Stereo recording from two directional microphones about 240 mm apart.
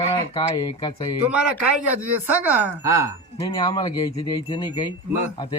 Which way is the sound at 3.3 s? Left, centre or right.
Centre.